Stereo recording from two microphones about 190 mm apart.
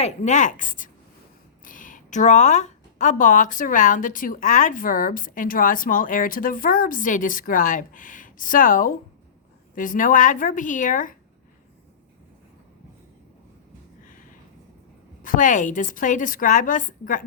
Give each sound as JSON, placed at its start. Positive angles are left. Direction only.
{"t": 0.0, "sound": "speech", "side_deg": 40}
{"t": 15.2, "sound": "speech", "side_deg": 45}